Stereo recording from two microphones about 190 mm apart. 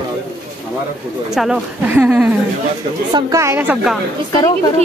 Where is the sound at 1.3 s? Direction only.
5° right (ahead or behind).